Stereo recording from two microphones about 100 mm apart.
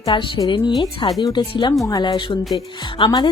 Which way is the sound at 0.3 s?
45° left (ahead or behind).